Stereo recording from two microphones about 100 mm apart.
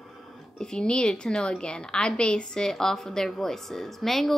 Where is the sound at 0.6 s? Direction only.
5° left (ahead or behind).